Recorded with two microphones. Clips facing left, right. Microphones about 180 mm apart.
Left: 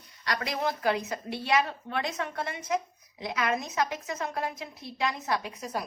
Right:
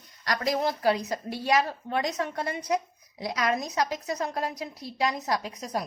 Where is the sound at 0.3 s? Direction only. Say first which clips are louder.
Right 4 dB; 40° right (ahead or behind).